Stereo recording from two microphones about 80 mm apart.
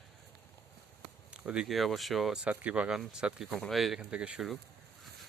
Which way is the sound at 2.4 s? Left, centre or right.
Centre.